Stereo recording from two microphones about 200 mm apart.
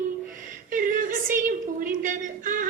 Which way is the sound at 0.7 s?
40° right (ahead or behind).